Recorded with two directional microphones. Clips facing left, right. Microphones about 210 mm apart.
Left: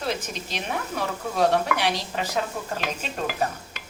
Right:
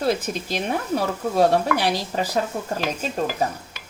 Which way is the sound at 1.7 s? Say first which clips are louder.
Right 4 dB; 35° right (ahead or behind).